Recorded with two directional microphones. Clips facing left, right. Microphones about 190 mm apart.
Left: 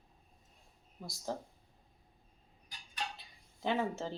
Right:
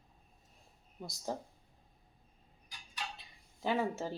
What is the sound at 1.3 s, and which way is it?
Speech, 15° right (ahead or behind).